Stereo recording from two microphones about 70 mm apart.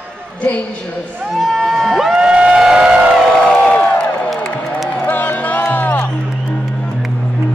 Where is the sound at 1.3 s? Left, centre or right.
Centre.